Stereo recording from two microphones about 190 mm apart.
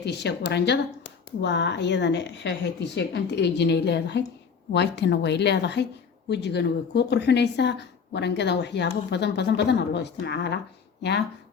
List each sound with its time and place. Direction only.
0.0 s speech: 60° left (ahead or behind)